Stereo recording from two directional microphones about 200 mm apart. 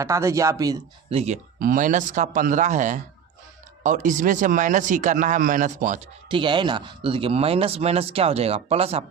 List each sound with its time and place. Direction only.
0.0 s speech: 15° right (ahead or behind)
1.1 s a man's voice: 35° right (ahead or behind)
6.3 s speech: 25° right (ahead or behind)